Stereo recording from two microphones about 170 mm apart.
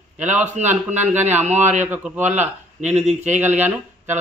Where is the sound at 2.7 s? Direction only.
40° right (ahead or behind).